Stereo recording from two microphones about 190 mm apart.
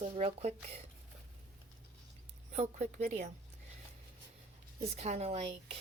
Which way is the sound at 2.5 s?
35° right (ahead or behind).